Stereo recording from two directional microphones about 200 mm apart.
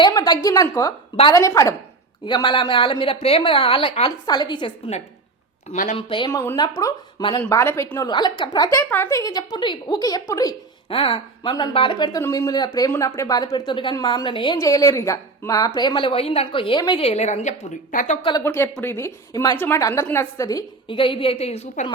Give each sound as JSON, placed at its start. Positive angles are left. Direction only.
{"t": 0.0, "sound": "a woman's voice", "side_deg": 20}
{"t": 5.6, "sound": "speech", "side_deg": 40}
{"t": 6.0, "sound": "speech", "side_deg": 25}
{"t": 7.6, "sound": "speech", "side_deg": 10}
{"t": 18.3, "sound": "speech", "side_deg": 15}